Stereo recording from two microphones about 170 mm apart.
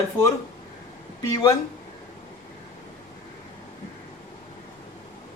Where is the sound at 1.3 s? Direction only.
20° left (ahead or behind).